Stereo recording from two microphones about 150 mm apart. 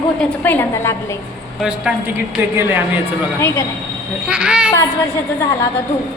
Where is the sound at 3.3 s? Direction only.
20° left (ahead or behind).